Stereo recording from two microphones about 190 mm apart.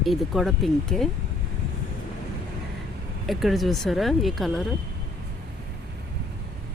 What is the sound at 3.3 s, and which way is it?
Speech, centre (ahead or behind).